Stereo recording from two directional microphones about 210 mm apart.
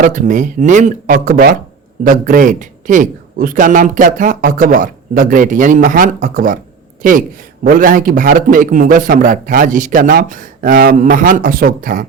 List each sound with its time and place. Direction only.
0.0 s a man's voice: 40° right (ahead or behind)